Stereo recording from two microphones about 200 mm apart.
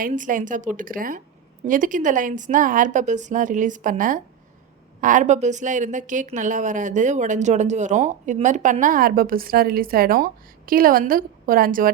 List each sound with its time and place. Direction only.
0.0 s a woman's voice: 40° right (ahead or behind)